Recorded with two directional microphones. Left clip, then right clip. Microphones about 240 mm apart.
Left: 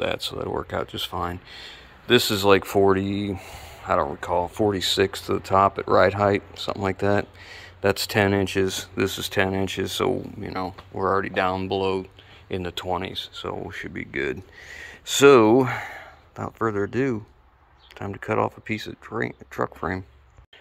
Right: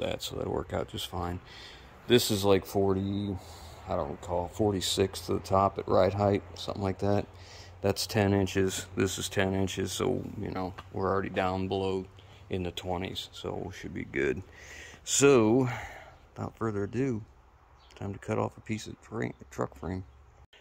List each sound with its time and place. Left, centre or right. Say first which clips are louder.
0.0 s speech: left 7 dB; centre
3.0 s speech: left 8 dB; left
4.2 s speech: left 7 dB; centre